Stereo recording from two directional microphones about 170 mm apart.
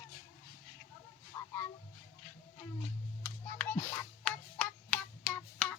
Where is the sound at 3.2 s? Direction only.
10° left (ahead or behind).